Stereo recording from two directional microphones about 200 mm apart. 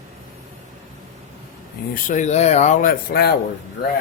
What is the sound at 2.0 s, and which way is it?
Speech, 40° left (ahead or behind).